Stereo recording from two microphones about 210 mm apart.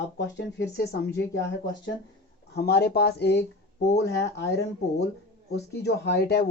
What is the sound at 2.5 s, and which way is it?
Speech, 50° left (ahead or behind).